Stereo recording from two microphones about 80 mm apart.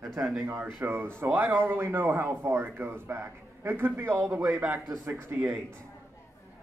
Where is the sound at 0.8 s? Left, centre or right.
Right.